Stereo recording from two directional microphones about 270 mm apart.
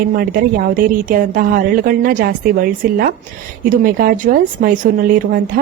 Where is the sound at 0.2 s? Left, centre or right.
Right.